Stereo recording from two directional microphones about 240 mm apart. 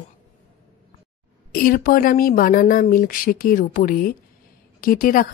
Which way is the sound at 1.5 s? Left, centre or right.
Left.